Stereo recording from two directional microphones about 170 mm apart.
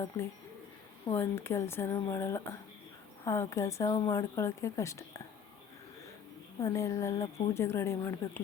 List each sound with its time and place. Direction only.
1.1 s a woman's voice: 15° left (ahead or behind)
6.6 s a woman's voice: 20° left (ahead or behind)